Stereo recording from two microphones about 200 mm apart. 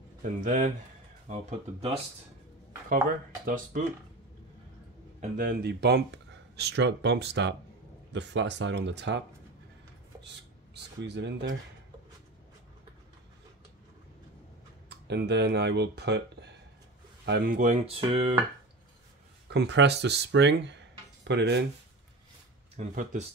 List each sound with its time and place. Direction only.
0.2 s speech: 40° right (ahead or behind)
3.4 s speech: 40° right (ahead or behind)
5.4 s speech: 50° right (ahead or behind)
10.2 s speech: 60° right (ahead or behind)
15.0 s speech: 60° right (ahead or behind); by 18.4 s 25° right (ahead or behind)
19.5 s speech: 60° right (ahead or behind)
22.8 s speech: 35° right (ahead or behind)